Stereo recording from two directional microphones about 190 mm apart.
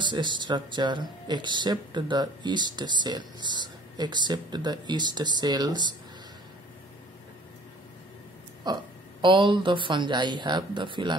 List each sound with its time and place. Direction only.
0.0 s speech: 25° right (ahead or behind)
8.6 s speech: 20° right (ahead or behind)